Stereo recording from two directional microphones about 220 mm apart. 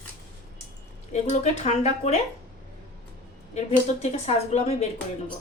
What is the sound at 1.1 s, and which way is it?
Speech, 30° left (ahead or behind).